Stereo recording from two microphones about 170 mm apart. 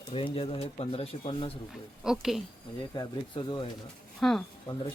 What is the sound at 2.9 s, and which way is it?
Speech, 25° left (ahead or behind).